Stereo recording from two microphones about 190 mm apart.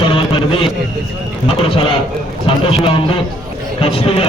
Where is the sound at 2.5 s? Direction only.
30° left (ahead or behind).